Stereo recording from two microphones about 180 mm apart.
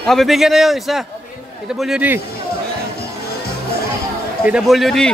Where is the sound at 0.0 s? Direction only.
Centre (ahead or behind).